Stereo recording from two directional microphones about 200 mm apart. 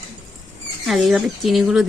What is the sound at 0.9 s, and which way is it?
Speech, centre (ahead or behind).